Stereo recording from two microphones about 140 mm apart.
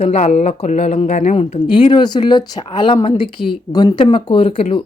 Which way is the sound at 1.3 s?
35° left (ahead or behind).